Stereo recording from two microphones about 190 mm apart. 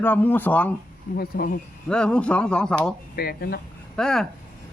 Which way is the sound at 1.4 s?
50° left (ahead or behind).